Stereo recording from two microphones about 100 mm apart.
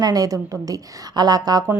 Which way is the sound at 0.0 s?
40° right (ahead or behind).